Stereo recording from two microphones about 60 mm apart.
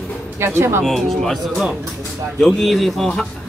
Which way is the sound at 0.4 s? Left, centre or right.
Right.